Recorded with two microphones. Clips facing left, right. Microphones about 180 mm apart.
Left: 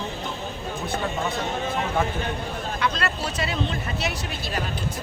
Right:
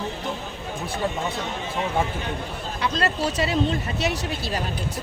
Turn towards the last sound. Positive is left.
turn(degrees=-40)  # may be behind; listen again after turning